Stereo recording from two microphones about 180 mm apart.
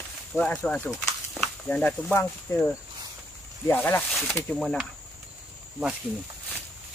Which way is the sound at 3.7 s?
10° left (ahead or behind).